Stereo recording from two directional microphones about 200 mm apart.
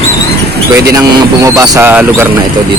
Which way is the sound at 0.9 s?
15° right (ahead or behind).